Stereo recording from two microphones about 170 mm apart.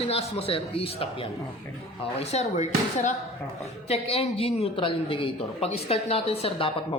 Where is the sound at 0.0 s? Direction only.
35° left (ahead or behind).